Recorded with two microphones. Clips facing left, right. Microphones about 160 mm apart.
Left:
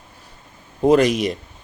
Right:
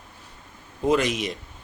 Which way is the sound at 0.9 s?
35° left (ahead or behind).